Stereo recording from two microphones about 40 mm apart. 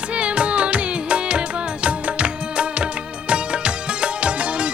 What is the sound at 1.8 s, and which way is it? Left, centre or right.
Music of bollywood, right.